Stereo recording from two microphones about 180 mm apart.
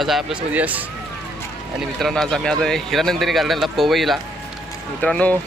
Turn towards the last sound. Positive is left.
turn(degrees=5)  # may be behind; listen again after turning